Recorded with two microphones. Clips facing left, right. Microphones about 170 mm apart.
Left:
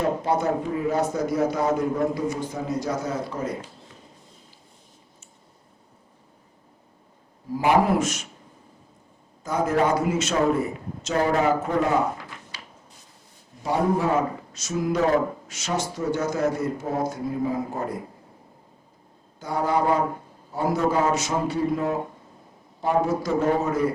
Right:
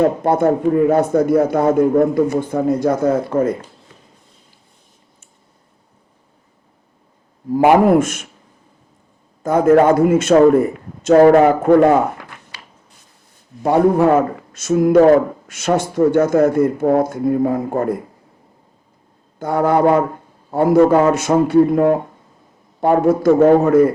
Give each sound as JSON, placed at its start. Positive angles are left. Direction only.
{"t": 0.0, "sound": "speech", "side_deg": -55}
{"t": 7.5, "sound": "a man's voice", "side_deg": -55}
{"t": 9.4, "sound": "speech", "side_deg": -55}
{"t": 13.6, "sound": "speech", "side_deg": -55}
{"t": 19.4, "sound": "speech", "side_deg": -55}